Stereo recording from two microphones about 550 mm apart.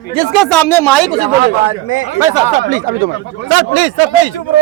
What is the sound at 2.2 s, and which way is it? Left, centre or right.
Speech, centre.